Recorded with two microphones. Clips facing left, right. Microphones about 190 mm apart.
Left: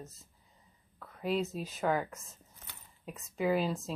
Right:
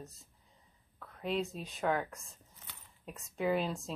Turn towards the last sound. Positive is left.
turn(degrees=0)  # may be behind; listen again after turning